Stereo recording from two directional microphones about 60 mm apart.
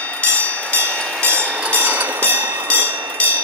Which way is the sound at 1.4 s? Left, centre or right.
Centre.